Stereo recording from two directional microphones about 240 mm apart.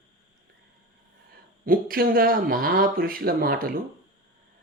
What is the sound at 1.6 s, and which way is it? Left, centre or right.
Speech, right.